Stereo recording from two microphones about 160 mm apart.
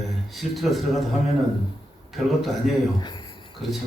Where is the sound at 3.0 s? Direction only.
30° left (ahead or behind).